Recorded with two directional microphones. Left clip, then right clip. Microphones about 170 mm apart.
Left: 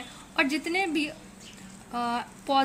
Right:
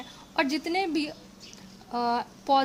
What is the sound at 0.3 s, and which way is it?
A woman's voice, 65° right (ahead or behind).